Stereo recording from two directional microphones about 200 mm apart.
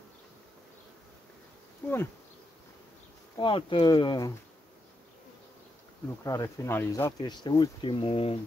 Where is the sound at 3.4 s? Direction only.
25° left (ahead or behind).